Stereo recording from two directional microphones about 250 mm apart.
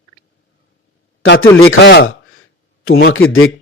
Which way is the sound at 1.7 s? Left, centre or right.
Left.